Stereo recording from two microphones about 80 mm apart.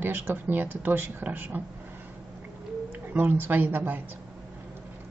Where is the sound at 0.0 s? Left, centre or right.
Right.